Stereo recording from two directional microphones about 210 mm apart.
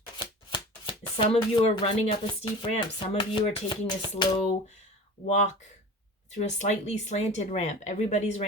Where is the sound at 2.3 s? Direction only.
25° left (ahead or behind).